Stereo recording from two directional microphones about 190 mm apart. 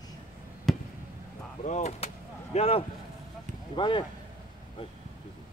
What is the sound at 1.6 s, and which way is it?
Speech, 35° left (ahead or behind).